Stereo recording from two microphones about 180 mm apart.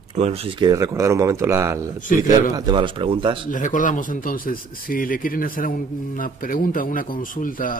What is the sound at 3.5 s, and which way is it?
Speech, 45° left (ahead or behind).